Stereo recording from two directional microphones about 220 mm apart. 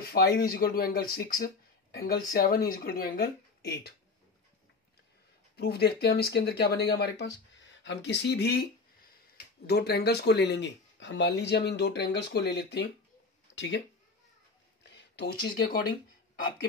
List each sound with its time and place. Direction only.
0.0 s speech: 45° left (ahead or behind)
5.6 s speech: 50° left (ahead or behind)
9.7 s speech: 45° left (ahead or behind)
14.8 s a sound: 50° left (ahead or behind)